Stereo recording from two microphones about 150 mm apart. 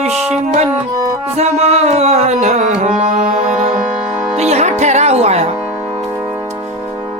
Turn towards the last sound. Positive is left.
turn(degrees=-45)  # may be behind; listen again after turning